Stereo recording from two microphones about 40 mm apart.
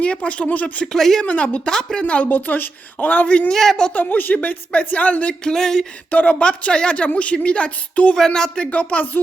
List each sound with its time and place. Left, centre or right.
0.0 s speech: left
0.4 s a woman's voice: left
0.9 s a sound: centre
1.2 s speech: left
1.6 s speech: centre
2.2 s a woman's voice: left
3.5 s a sound: centre
3.9 s speech: left
5.5 s a sound: centre
6.1 s speech: left
6.4 s speech: left
8.1 s speech: centre; by 9.0 s left